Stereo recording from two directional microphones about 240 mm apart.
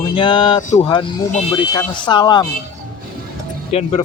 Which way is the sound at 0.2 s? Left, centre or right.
Left.